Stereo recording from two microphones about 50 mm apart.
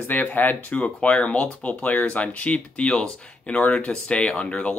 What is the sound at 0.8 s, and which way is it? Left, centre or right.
Speech, left.